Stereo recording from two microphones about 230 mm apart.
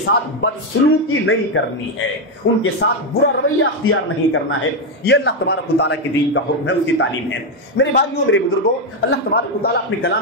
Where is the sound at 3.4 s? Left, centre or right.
Left.